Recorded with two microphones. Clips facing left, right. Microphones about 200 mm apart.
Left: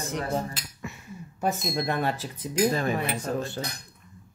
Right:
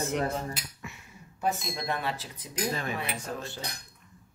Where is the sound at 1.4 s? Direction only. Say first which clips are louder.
Left 4 dB; 45° left (ahead or behind).